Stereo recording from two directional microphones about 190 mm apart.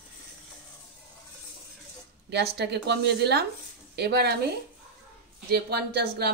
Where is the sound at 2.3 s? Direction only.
60° right (ahead or behind).